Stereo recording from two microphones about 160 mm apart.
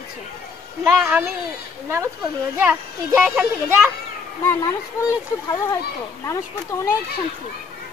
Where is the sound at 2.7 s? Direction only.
10° right (ahead or behind).